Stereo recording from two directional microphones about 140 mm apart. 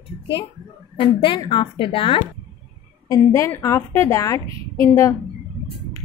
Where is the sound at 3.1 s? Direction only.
20° left (ahead or behind).